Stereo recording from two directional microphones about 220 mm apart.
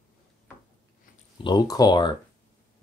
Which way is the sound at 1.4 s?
20° left (ahead or behind).